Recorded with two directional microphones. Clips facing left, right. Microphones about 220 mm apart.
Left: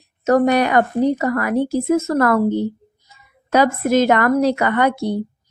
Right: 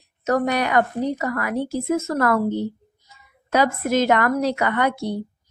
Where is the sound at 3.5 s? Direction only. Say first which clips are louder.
Left 4 dB; 40° left (ahead or behind).